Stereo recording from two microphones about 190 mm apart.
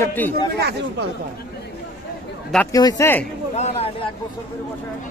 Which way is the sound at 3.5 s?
30° left (ahead or behind).